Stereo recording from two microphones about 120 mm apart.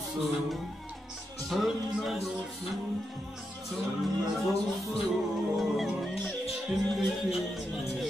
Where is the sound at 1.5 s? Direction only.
Centre (ahead or behind).